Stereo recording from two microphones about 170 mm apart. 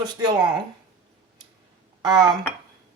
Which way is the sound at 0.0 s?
25° right (ahead or behind).